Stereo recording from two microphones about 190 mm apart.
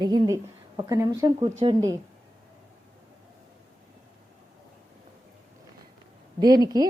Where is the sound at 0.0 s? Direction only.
20° right (ahead or behind).